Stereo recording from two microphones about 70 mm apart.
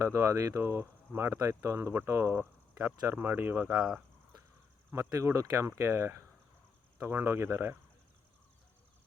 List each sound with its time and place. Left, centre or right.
0.0 s speech: right
2.3 s speech: right
3.7 s speech: centre
4.9 s speech: right